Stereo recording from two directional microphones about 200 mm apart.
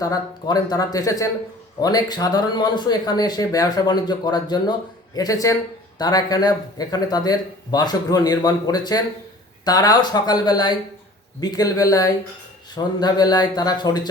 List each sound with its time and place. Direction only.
0.0 s speech: 20° left (ahead or behind)